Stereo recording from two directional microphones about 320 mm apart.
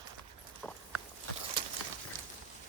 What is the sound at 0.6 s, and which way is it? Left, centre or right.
Clip-clop, centre.